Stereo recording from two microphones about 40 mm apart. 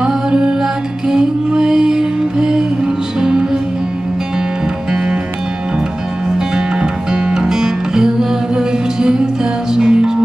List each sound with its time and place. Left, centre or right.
0.0 s music: centre
6.5 s music: centre